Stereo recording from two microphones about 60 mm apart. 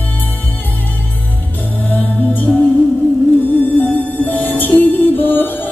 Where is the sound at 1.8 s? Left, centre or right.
Left.